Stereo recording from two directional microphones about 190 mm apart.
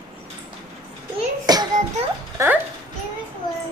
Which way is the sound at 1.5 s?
20° right (ahead or behind).